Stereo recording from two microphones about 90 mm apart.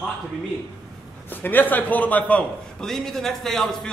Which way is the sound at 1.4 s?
20° left (ahead or behind).